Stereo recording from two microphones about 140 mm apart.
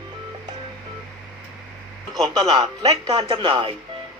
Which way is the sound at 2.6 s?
30° right (ahead or behind).